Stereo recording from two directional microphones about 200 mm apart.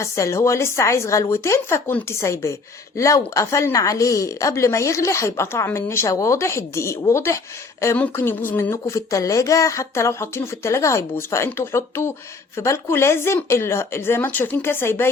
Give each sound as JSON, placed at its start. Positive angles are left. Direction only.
{"t": 0.0, "sound": "speech", "side_deg": 15}